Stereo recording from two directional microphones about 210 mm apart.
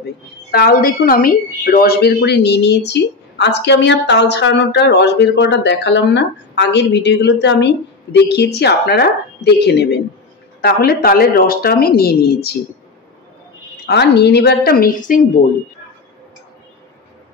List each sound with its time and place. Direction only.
0.5 s a woman's voice: 45° left (ahead or behind)
13.8 s a woman's voice: 50° left (ahead or behind)